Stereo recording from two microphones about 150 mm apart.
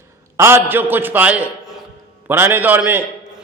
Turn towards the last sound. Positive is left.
turn(degrees=-15)  # may be behind; listen again after turning